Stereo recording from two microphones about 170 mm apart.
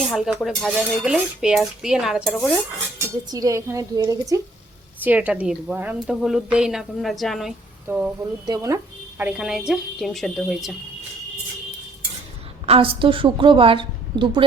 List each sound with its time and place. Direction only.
0.1 s dishes: centre (ahead or behind)
3.2 s a woman's voice: 20° right (ahead or behind)
5.0 s dishes: 10° right (ahead or behind)
7.9 s speech: 10° right (ahead or behind)
8.4 s speech: 20° right (ahead or behind)
9.2 s dishes: 5° right (ahead or behind)
12.6 s a woman's voice: 35° right (ahead or behind)